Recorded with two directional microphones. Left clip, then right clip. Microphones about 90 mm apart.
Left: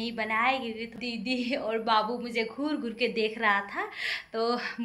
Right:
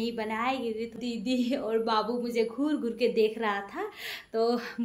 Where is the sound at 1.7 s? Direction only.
25° right (ahead or behind).